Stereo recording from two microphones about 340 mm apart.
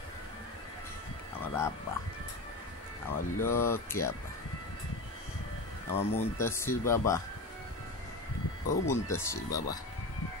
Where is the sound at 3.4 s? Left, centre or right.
Centre.